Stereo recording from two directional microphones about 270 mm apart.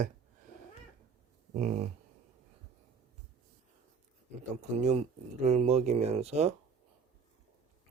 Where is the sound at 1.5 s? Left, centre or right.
Right.